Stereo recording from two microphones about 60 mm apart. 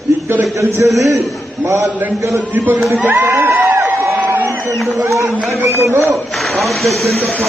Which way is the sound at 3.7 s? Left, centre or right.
Right.